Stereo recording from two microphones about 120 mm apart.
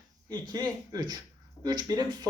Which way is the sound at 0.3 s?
35° right (ahead or behind).